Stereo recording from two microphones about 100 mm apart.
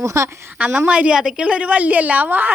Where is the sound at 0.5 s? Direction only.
15° right (ahead or behind).